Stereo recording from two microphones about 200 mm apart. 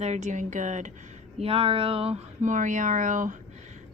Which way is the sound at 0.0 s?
35° right (ahead or behind).